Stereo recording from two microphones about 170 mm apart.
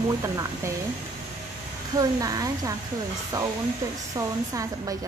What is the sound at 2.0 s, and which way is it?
A woman's voice, 20° right (ahead or behind).